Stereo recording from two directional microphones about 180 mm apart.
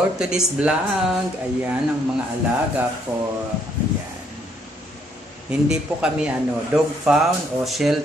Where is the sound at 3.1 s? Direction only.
15° right (ahead or behind).